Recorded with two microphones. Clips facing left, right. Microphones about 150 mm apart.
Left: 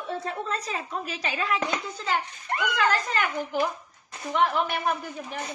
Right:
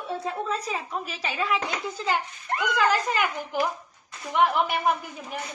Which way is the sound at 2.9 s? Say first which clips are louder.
Right 2 dB; 10° right (ahead or behind).